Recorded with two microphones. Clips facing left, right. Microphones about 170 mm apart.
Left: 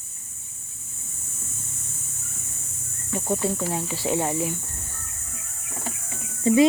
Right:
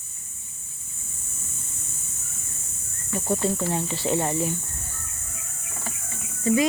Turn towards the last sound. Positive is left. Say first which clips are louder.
# left 3 dB
turn(degrees=25)  # may be behind; listen again after turning